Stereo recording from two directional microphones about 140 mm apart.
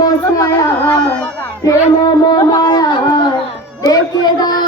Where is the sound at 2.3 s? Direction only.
30° left (ahead or behind).